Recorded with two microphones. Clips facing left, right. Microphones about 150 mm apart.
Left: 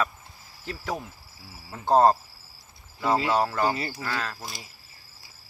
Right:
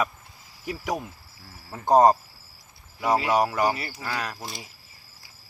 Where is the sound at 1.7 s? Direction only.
15° right (ahead or behind).